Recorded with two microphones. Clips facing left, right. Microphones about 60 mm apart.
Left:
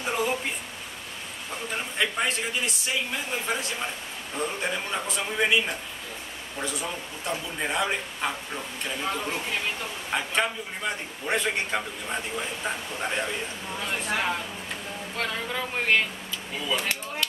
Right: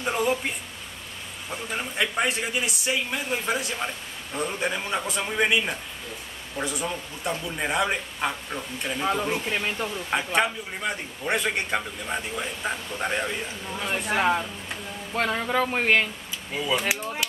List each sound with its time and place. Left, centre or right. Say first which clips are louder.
0.0 s a man's voice: right 2 dB; centre
15.1 s speech: right 7 dB; centre
16.7 s chop: right 3 dB; centre